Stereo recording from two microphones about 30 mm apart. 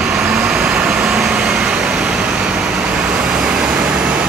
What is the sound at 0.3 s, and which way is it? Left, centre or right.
Vehicle, right.